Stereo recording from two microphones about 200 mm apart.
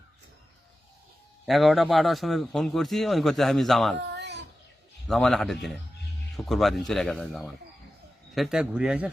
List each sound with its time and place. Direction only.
1.5 s a man's voice: centre (ahead or behind)
4.1 s a sound: 60° right (ahead or behind)
5.0 s a man's voice: centre (ahead or behind)